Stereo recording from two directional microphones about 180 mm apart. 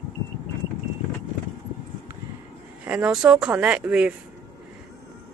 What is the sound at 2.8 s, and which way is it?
Speech, 5° right (ahead or behind).